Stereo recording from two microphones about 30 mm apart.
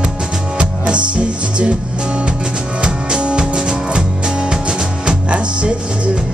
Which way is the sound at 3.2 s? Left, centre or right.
Right.